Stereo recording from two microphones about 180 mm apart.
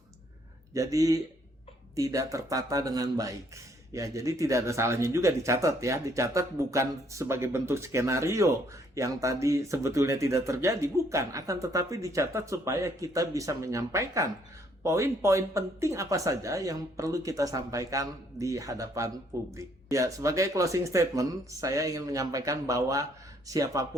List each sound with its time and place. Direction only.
0.7 s speech: 20° right (ahead or behind)